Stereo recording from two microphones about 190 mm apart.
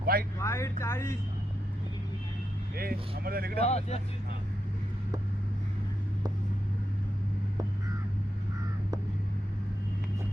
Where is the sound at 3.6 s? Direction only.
35° left (ahead or behind).